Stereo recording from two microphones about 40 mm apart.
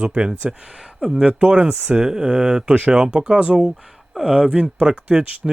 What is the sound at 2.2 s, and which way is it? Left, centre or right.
Speech, right.